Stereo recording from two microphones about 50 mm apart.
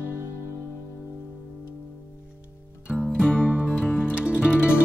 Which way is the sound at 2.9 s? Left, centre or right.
Centre.